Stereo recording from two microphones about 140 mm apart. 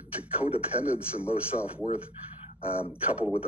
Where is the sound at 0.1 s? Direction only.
10° right (ahead or behind).